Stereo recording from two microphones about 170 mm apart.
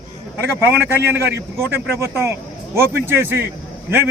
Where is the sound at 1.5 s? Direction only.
15° right (ahead or behind).